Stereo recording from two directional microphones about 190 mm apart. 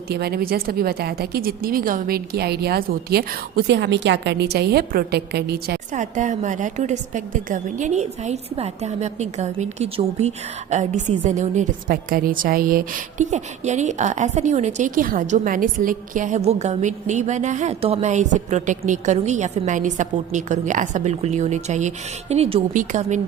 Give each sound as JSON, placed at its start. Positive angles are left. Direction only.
{"t": 0.1, "sound": "speech", "side_deg": -55}
{"t": 5.9, "sound": "a woman's voice", "side_deg": -40}